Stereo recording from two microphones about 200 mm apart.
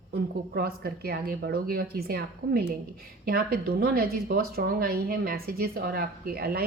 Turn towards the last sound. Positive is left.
turn(degrees=-50)  # may be behind; listen again after turning